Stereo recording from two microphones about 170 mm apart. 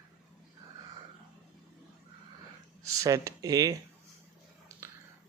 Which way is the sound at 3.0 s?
20° right (ahead or behind).